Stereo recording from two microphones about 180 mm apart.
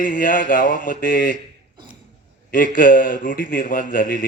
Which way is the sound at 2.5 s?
50° left (ahead or behind).